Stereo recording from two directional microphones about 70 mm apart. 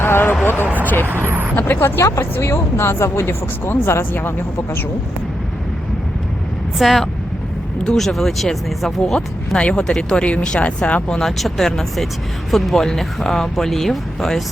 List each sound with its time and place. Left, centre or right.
0.0 s a sound: left
1.0 s speech: right
1.5 s speech: left
2.0 s speech: left
6.7 s speech: centre
11.2 s speech: centre